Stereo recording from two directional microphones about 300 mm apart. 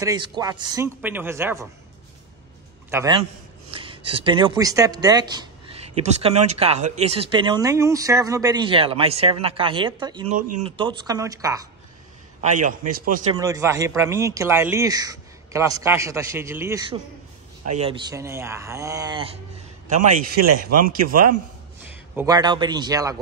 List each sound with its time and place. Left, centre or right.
0.0 s speech: centre
2.9 s a man's voice: centre
3.7 s a sound: centre
4.1 s speech: centre
12.4 s a man's voice: right
13.3 s speech: centre
19.9 s a man's voice: right
22.1 s speech: centre